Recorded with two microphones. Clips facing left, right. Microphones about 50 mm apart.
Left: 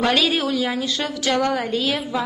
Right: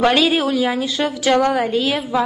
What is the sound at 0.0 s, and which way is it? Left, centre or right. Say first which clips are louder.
A woman's voice: right 4 dB; centre.